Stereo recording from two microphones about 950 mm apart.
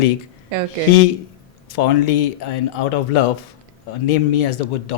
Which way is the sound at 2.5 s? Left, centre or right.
Left.